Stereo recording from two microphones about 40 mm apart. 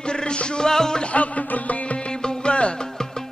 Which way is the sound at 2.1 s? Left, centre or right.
Left.